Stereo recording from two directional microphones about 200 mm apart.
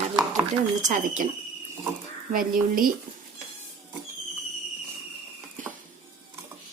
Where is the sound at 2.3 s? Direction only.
45° right (ahead or behind).